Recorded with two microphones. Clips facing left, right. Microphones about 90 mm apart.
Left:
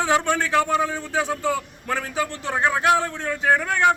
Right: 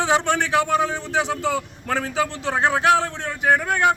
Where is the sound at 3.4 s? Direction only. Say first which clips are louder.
Right 1 dB; 15° right (ahead or behind).